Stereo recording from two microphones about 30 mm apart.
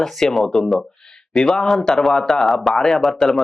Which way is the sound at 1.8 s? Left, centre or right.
Left.